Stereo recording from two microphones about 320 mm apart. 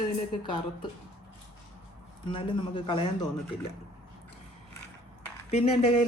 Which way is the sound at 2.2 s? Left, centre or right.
Centre.